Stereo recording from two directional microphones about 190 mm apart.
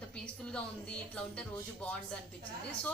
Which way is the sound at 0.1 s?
5° left (ahead or behind).